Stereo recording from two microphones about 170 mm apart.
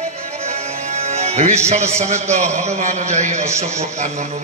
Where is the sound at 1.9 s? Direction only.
40° right (ahead or behind).